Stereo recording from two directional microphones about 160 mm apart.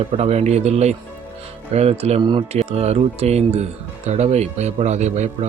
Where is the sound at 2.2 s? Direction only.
30° right (ahead or behind); by 5.2 s 45° right (ahead or behind).